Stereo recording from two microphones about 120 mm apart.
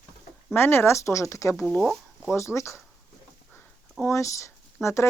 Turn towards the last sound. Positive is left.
turn(degrees=25)  # may be behind; listen again after turning